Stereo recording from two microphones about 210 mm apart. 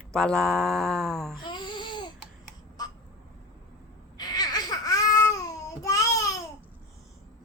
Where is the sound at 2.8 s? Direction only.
20° left (ahead or behind).